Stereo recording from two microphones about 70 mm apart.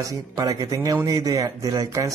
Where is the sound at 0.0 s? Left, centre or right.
Right.